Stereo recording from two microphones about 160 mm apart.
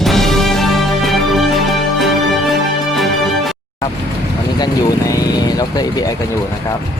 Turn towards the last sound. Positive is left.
turn(degrees=25)  # may be behind; listen again after turning